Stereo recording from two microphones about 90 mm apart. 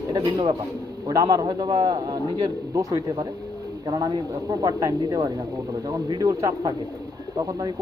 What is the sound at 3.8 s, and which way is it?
Speech, 50° right (ahead or behind).